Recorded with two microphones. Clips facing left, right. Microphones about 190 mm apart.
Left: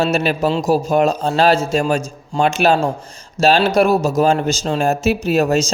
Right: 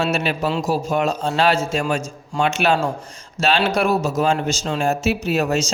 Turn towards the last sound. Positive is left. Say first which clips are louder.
# left 4 dB
turn(degrees=35)  # may be behind; listen again after turning